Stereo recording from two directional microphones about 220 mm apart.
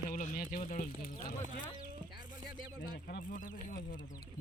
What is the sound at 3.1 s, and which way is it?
Speech, 35° left (ahead or behind).